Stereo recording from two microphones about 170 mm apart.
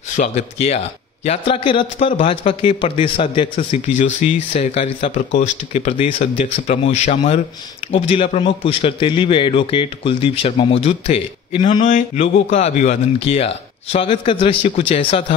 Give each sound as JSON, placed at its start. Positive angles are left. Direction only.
{"t": 0.1, "sound": "a man's voice", "side_deg": 40}
{"t": 11.8, "sound": "a man's voice", "side_deg": 45}